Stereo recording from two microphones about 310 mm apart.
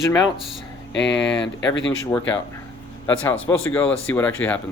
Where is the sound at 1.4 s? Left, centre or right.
Left.